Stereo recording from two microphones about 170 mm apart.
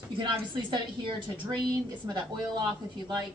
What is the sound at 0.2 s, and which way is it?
A woman's voice, 25° right (ahead or behind).